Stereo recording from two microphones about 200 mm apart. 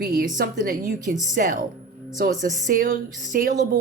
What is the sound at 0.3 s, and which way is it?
A woman's voice, 40° right (ahead or behind).